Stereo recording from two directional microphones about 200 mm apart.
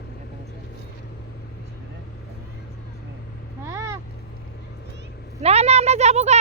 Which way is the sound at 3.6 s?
15° right (ahead or behind).